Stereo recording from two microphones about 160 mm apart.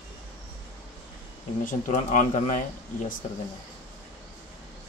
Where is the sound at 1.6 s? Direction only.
50° left (ahead or behind).